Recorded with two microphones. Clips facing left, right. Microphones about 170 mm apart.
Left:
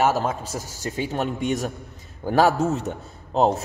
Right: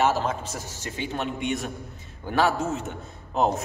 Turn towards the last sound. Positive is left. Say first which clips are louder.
# left 4 dB
turn(degrees=30)  # may be behind; listen again after turning